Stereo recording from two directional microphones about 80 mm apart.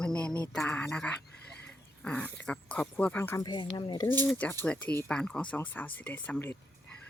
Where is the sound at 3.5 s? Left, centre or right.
Left.